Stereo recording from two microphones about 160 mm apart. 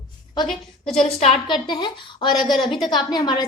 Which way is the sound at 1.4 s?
30° left (ahead or behind).